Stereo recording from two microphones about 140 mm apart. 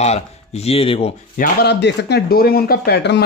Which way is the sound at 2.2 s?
90° left.